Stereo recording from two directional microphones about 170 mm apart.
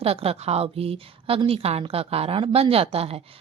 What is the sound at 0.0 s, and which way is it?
A woman's voice, 35° right (ahead or behind).